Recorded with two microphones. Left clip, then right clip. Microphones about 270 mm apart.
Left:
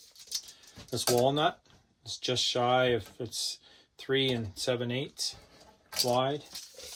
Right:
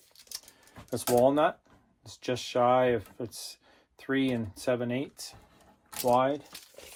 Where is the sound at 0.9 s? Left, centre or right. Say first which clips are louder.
Right 3 dB; right.